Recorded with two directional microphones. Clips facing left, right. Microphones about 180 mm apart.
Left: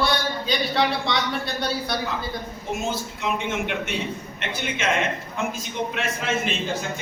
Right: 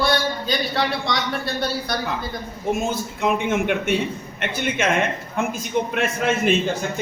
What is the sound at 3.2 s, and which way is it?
Speech, 50° right (ahead or behind).